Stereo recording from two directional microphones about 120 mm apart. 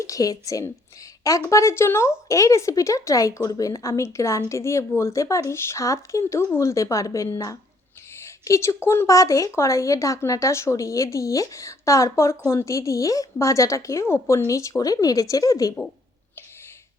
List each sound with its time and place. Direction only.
0.0 s speech: 30° left (ahead or behind)